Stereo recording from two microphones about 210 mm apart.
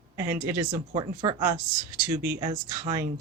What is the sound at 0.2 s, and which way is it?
A woman's voice, 15° right (ahead or behind).